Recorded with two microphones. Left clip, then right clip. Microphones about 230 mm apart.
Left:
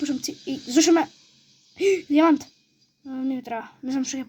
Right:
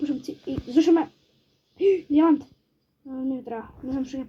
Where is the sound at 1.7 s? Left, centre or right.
Left.